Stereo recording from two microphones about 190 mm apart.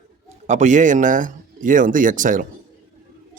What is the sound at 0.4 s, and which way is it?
Speech, 40° right (ahead or behind).